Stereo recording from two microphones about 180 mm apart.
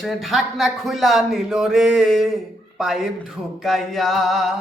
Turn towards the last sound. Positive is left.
turn(degrees=0)  # may be behind; listen again after turning